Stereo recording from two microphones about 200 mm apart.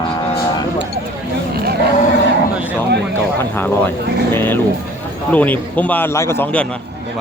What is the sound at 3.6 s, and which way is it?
A man's voice, 10° left (ahead or behind).